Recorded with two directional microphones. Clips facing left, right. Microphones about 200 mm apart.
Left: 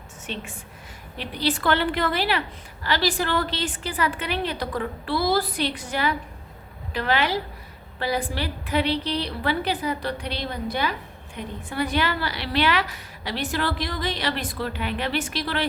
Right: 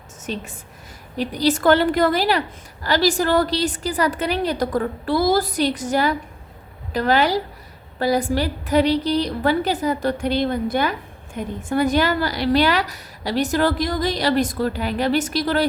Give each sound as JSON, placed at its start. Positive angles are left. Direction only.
{"t": 0.3, "sound": "a woman's voice", "side_deg": -40}